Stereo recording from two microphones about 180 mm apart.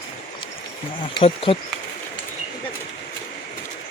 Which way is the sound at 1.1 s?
30° left (ahead or behind).